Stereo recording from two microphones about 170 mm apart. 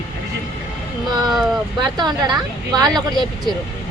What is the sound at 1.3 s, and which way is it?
Vehicle, centre (ahead or behind).